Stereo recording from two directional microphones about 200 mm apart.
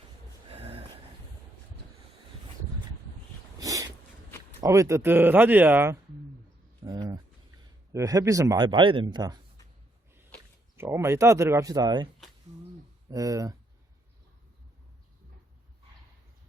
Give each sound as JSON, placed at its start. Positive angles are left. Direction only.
{"t": 0.5, "sound": "gasp", "side_deg": -30}
{"t": 3.6, "sound": "a sound", "side_deg": -15}
{"t": 4.6, "sound": "speech", "side_deg": -15}
{"t": 6.8, "sound": "a sound", "side_deg": -20}
{"t": 7.9, "sound": "speech", "side_deg": -15}
{"t": 10.8, "sound": "speech", "side_deg": -10}
{"t": 13.1, "sound": "speech", "side_deg": -15}